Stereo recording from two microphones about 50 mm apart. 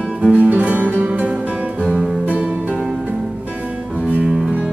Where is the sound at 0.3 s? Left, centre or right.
Right.